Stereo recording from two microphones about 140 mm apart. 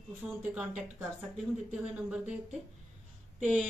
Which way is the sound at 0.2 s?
5° right (ahead or behind).